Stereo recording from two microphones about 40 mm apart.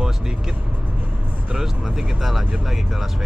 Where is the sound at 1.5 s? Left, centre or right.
Centre.